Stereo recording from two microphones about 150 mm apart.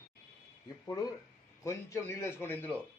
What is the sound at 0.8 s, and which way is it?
A man's voice, 25° left (ahead or behind).